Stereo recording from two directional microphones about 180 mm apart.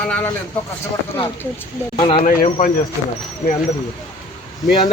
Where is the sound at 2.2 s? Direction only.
45° left (ahead or behind).